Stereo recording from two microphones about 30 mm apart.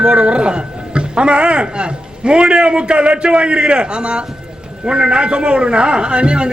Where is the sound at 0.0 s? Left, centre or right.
Right.